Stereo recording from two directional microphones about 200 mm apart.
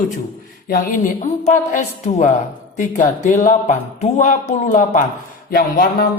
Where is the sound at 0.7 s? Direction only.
45° left (ahead or behind).